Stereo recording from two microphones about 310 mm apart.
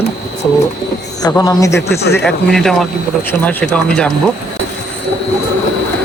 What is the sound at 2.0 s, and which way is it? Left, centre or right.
Speech, left.